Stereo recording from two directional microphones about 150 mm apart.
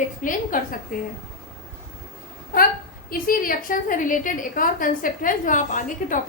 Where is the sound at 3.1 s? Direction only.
70° left (ahead or behind).